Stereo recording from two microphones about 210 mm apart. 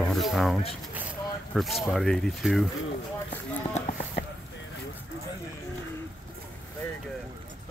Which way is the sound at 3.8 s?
30° left (ahead or behind).